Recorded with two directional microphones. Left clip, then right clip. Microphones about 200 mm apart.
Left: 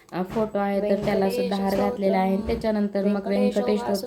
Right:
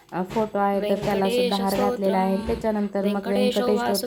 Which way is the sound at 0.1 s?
5° right (ahead or behind).